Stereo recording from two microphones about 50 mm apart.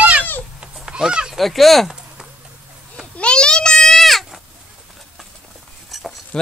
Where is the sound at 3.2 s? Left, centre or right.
Centre.